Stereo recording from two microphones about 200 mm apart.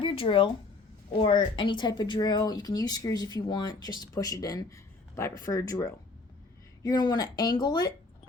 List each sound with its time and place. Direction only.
0.0 s speech: 25° left (ahead or behind)